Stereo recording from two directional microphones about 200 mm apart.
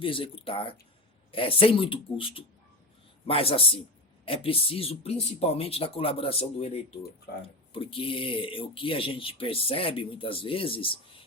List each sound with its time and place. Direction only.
0.0 s speech: 25° left (ahead or behind)